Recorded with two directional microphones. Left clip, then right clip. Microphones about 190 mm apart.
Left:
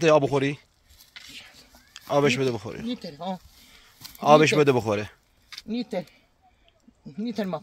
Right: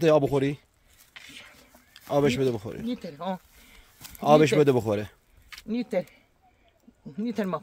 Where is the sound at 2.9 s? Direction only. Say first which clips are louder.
Right 1 dB; centre (ahead or behind).